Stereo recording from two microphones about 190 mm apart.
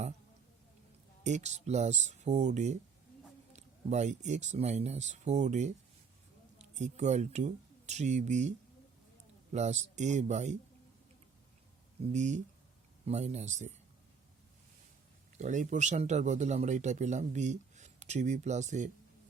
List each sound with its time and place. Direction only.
1.2 s speech: 40° right (ahead or behind)
12.1 s speech: 40° right (ahead or behind)
15.4 s speech: 40° right (ahead or behind)